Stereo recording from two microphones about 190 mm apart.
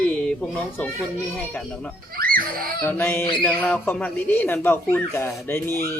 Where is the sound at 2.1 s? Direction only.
50° right (ahead or behind).